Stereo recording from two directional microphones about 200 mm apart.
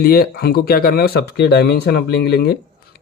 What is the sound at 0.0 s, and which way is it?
Speech, 50° left (ahead or behind).